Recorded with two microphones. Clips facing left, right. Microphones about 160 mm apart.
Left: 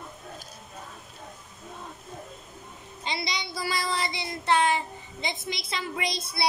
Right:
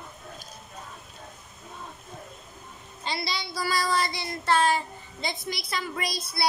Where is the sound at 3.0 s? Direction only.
20° left (ahead or behind).